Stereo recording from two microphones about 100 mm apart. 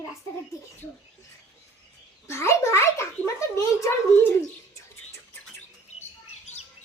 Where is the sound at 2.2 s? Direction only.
25° left (ahead or behind).